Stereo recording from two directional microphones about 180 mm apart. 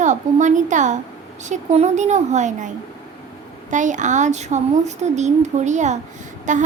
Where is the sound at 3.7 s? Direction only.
45° right (ahead or behind).